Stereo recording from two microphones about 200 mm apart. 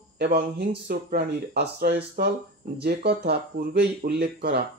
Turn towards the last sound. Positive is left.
turn(degrees=-50)  # may be behind; listen again after turning